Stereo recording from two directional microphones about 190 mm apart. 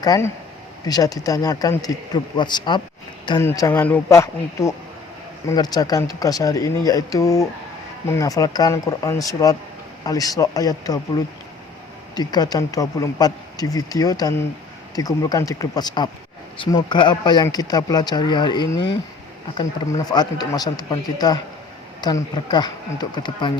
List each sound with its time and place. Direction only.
0.0 s speech: 20° left (ahead or behind)
20.1 s speech: 20° left (ahead or behind)